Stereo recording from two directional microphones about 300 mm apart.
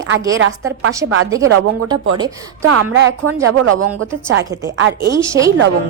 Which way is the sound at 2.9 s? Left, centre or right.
Right.